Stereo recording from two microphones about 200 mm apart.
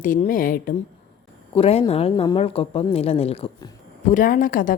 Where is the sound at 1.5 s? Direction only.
30° left (ahead or behind).